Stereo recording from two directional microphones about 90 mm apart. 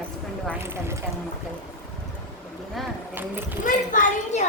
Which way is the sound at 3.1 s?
20° right (ahead or behind).